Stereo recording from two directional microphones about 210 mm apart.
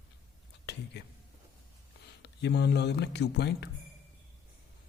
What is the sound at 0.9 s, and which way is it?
Speech, 55° left (ahead or behind).